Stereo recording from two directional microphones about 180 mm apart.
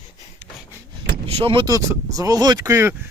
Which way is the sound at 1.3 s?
30° right (ahead or behind).